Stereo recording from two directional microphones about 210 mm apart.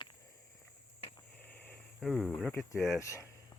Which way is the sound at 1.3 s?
5° left (ahead or behind).